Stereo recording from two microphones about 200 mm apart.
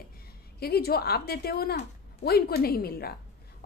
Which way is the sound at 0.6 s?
50° left (ahead or behind).